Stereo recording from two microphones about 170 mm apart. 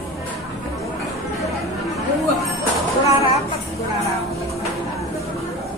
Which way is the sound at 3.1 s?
20° right (ahead or behind).